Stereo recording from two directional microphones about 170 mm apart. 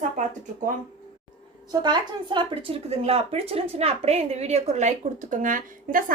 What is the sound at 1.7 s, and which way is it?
Speech, 25° right (ahead or behind).